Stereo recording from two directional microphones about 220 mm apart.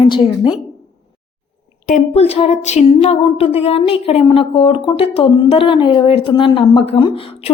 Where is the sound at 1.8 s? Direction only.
30° left (ahead or behind).